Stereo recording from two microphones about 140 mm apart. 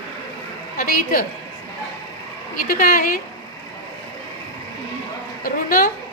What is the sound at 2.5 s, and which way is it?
Speech, 90° left.